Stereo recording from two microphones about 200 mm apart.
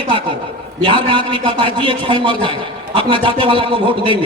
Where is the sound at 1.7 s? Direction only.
25° right (ahead or behind).